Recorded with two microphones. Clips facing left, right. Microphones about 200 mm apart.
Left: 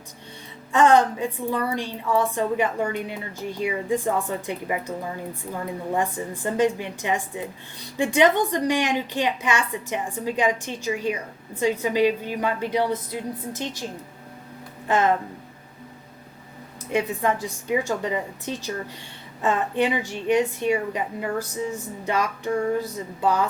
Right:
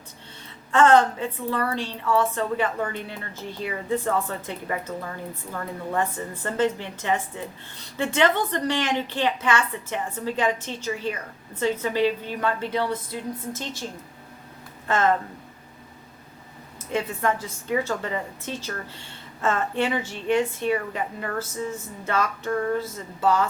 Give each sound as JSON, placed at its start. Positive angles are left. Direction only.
{"t": 0.7, "sound": "a woman's voice", "side_deg": 15}
{"t": 14.8, "sound": "speech", "side_deg": 15}
{"t": 16.9, "sound": "a woman's voice", "side_deg": 15}